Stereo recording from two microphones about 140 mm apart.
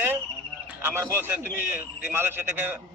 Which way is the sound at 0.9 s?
15° right (ahead or behind).